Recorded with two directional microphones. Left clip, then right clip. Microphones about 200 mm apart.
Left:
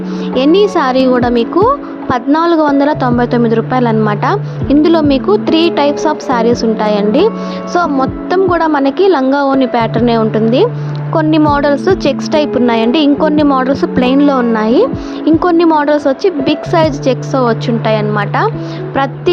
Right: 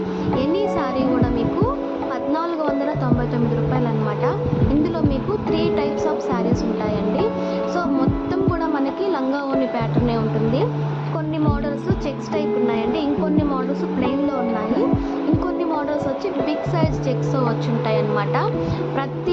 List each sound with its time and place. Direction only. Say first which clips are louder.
0.3 s speech: left 12 dB; 50° left (ahead or behind)